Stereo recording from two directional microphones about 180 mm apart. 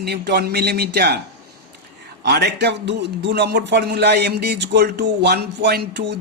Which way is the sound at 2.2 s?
65° right (ahead or behind).